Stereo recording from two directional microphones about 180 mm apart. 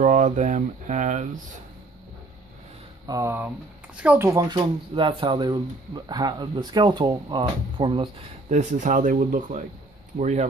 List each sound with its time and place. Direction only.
0.0 s speech: 45° right (ahead or behind)
3.1 s speech: 15° right (ahead or behind); by 10.4 s 40° right (ahead or behind)